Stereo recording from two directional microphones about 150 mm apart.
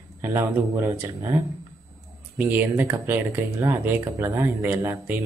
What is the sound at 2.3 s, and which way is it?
Speech, 10° right (ahead or behind).